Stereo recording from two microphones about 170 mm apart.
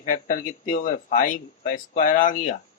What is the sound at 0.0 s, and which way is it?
Speech, 50° left (ahead or behind).